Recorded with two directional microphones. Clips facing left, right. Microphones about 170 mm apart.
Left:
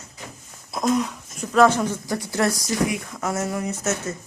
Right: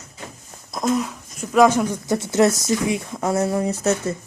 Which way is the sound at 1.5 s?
10° right (ahead or behind).